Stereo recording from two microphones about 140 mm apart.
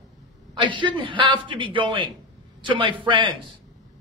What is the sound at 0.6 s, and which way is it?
A man's voice, 35° right (ahead or behind).